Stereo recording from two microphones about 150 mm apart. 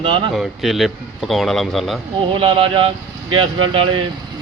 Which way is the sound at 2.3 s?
35° right (ahead or behind).